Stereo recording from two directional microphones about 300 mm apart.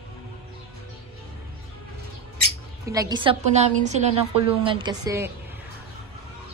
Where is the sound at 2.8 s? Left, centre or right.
Centre.